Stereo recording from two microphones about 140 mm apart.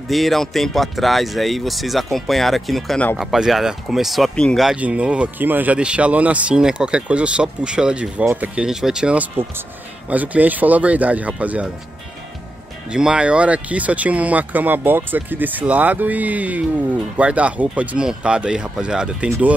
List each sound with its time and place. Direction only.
0.1 s speech: centre (ahead or behind)
12.9 s speech: 5° right (ahead or behind)